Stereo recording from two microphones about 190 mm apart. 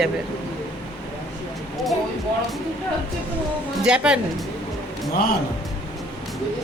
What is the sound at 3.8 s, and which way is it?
Speech, 5° right (ahead or behind).